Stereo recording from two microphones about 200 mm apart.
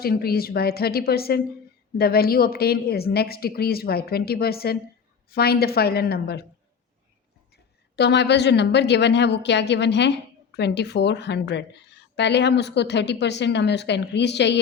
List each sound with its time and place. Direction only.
0.0 s speech: 50° left (ahead or behind)
7.5 s a woman's voice: 55° left (ahead or behind)